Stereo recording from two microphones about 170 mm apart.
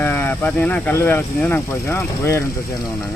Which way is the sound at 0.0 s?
10° left (ahead or behind).